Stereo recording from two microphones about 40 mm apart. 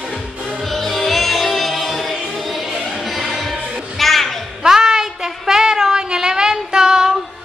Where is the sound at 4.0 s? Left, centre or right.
Centre.